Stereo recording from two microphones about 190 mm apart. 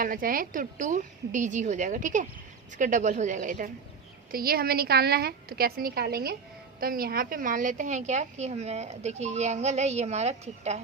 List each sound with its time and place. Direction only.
0.0 s a woman's voice: 45° right (ahead or behind)